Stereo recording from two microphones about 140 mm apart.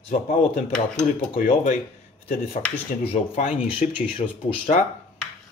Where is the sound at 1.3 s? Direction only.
65° left (ahead or behind).